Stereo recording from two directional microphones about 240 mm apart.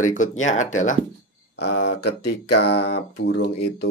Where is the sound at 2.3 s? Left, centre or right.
Left.